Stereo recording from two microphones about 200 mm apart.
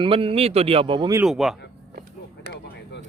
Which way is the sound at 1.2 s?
Centre (ahead or behind).